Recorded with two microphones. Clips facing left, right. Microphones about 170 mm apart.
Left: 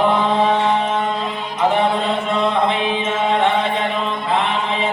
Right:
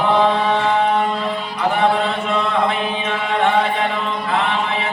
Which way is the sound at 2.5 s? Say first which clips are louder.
Left 1 dB; 20° left (ahead or behind).